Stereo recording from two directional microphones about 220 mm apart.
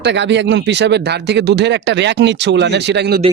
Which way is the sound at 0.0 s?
50° right (ahead or behind).